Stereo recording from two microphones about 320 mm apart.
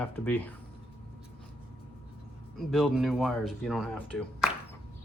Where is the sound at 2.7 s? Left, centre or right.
Centre.